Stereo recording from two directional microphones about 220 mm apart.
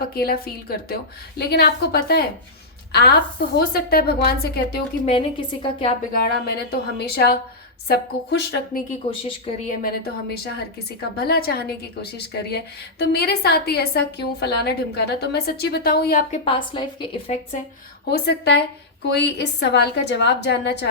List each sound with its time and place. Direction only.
0.0 s a woman's voice: 45° left (ahead or behind)
5.0 s a woman's voice: 25° left (ahead or behind)
6.2 s a woman's voice: 45° left (ahead or behind)
8.9 s a woman's voice: 30° left (ahead or behind)
9.8 s a woman's voice: 45° left (ahead or behind)
16.4 s a woman's voice: 25° left (ahead or behind)
18.1 s a woman's voice: 50° left (ahead or behind)